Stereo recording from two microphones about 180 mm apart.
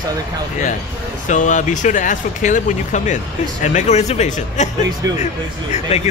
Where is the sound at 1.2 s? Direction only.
45° left (ahead or behind).